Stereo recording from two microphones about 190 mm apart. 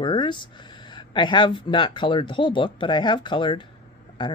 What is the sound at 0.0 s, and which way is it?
Speech, 25° left (ahead or behind).